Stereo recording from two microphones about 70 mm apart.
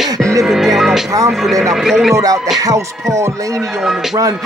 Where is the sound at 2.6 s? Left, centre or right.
Right.